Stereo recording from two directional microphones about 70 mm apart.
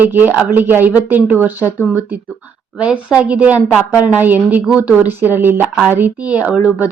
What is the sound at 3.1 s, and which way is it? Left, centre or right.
A woman's voice, centre.